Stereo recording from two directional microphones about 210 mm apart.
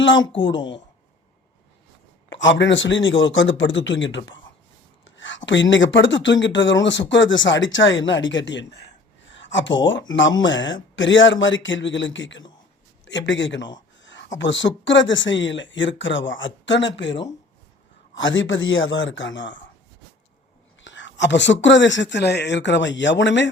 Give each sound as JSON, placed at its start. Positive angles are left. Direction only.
{"t": 0.0, "sound": "speech", "side_deg": 65}
{"t": 2.3, "sound": "speech", "side_deg": 60}
{"t": 5.0, "sound": "a sound", "side_deg": 65}
{"t": 5.5, "sound": "speech", "side_deg": 60}
{"t": 20.8, "sound": "speech", "side_deg": 60}